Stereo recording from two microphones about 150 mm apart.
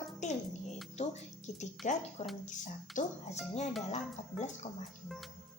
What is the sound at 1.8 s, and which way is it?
A woman's voice, 55° left (ahead or behind).